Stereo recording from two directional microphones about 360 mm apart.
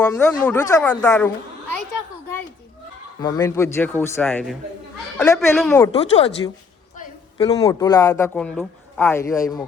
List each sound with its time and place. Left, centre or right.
0.0 s speech: centre
3.2 s a woman's voice: centre